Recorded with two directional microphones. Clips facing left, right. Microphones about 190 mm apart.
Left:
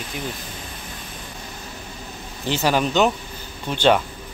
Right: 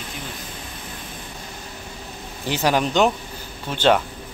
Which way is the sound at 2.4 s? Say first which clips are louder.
Even; 10° right (ahead or behind).